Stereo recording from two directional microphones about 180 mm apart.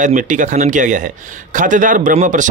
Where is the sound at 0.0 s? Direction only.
45° right (ahead or behind).